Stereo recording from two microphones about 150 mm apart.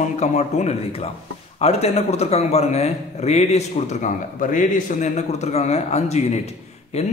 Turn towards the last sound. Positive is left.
turn(degrees=45)  # may be behind; listen again after turning